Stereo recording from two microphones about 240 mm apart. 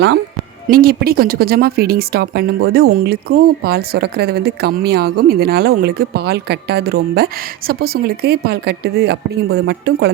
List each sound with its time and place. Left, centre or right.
0.7 s speech: right